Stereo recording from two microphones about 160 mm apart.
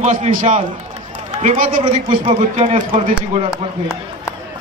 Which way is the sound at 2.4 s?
50° right (ahead or behind).